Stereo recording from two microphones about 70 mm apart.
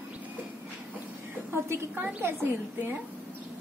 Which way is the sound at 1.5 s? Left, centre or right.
Right.